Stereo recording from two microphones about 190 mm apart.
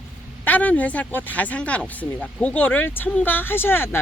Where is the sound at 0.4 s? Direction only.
10° left (ahead or behind).